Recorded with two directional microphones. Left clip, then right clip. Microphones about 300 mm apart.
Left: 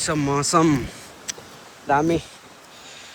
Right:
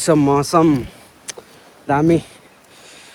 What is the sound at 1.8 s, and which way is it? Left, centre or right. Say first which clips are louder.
Speech: right 4 dB; right.